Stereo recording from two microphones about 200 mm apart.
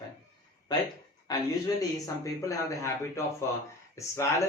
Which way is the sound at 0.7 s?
20° left (ahead or behind).